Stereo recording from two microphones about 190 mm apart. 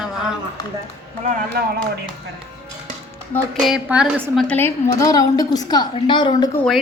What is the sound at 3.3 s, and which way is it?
Speech, centre (ahead or behind).